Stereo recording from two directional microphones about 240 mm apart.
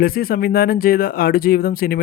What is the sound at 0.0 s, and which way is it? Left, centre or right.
Speech, left.